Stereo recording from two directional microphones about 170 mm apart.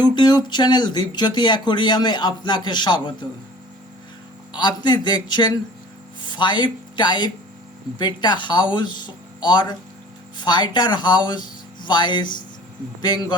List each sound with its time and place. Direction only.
0.0 s speech: 25° left (ahead or behind)
4.5 s a man's voice: 25° left (ahead or behind)